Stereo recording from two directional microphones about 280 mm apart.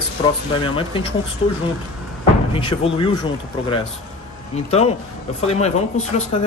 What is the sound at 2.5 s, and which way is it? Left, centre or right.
Speech, centre.